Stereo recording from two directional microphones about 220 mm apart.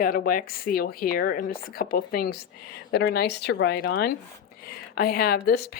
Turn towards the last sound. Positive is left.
turn(degrees=45)  # may be behind; listen again after turning